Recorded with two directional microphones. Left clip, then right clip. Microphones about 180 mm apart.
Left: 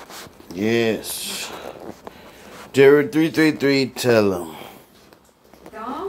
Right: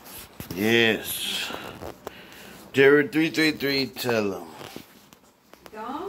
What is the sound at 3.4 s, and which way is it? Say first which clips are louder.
Speech: left 6 dB; 35° left (ahead or behind).